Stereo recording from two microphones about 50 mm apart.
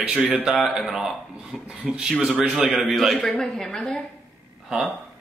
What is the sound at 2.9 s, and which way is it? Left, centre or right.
A man's voice, centre.